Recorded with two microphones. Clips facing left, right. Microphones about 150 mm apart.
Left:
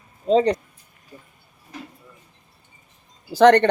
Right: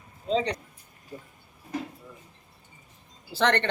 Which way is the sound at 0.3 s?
45° left (ahead or behind).